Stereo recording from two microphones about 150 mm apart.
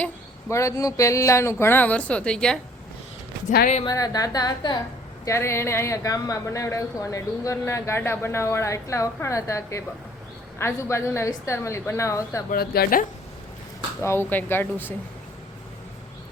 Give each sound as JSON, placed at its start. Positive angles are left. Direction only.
{"t": 0.5, "sound": "speech", "side_deg": 20}
{"t": 3.8, "sound": "a woman's voice", "side_deg": 25}
{"t": 12.5, "sound": "speech", "side_deg": 85}
{"t": 14.0, "sound": "speech", "side_deg": 15}